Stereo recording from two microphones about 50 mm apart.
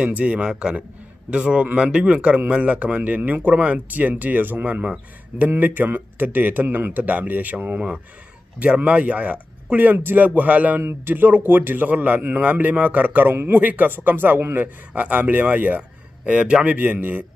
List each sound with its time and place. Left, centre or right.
0.0 s a man's voice: right
4.8 s speech: right
5.6 s a man's voice: right
10.8 s a man's voice: right
14.9 s a man's voice: right
16.3 s speech: right
16.6 s a man's voice: right